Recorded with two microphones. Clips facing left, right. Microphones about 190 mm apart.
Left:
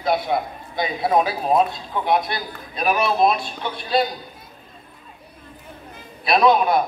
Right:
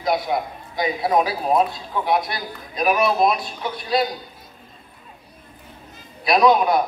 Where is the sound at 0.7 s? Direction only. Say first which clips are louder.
Even; 25° left (ahead or behind).